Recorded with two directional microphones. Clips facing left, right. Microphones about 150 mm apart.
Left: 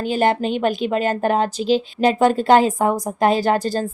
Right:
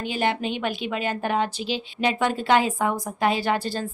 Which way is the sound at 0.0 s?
45° left (ahead or behind).